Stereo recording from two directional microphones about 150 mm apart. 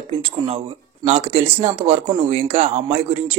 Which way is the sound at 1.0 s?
45° right (ahead or behind).